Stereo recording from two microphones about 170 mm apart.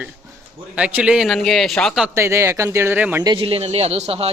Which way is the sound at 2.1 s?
15° right (ahead or behind).